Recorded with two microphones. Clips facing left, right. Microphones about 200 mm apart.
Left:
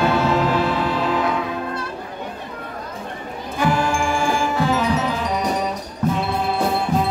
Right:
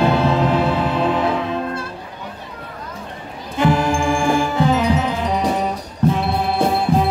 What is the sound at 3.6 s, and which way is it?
Music, 25° right (ahead or behind).